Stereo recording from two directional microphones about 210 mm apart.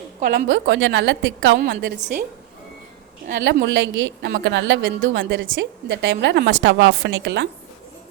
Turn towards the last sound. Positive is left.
turn(degrees=-60)  # may be behind; listen again after turning